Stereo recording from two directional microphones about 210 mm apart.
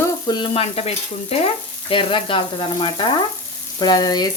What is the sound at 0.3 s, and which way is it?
Frying, 20° left (ahead or behind).